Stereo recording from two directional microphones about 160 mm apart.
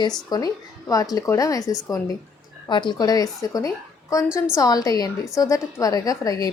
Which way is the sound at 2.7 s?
30° left (ahead or behind).